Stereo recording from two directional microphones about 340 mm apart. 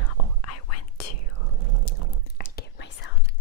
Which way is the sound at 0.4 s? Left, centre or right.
Left.